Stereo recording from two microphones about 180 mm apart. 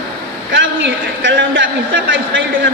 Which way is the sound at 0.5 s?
80° right.